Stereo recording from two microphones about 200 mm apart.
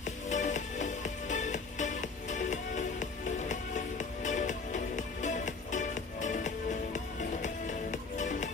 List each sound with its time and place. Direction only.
0.3 s music: 40° left (ahead or behind)